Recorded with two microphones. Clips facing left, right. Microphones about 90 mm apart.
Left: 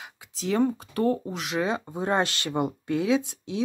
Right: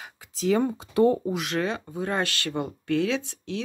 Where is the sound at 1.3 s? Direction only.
Centre (ahead or behind).